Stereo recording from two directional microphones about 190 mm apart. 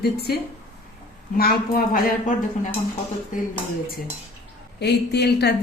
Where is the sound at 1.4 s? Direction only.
50° left (ahead or behind).